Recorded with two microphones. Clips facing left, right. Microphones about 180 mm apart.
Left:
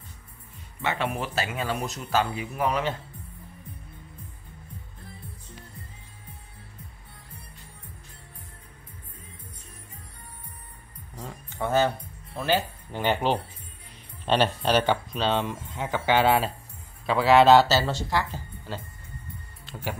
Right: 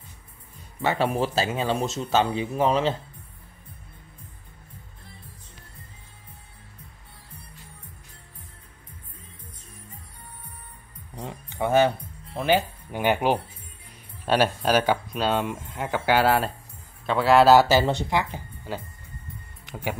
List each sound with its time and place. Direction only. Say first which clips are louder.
0.8 s speech: right 5 dB; 35° right (ahead or behind)
11.1 s music: right 3 dB; 20° right (ahead or behind)
12.4 s speech: right 3 dB; 15° right (ahead or behind)